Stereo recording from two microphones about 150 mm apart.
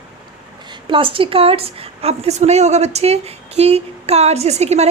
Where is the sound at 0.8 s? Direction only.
35° right (ahead or behind).